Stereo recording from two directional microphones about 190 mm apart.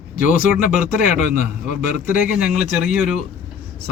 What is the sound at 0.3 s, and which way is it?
A man's voice, 45° left (ahead or behind).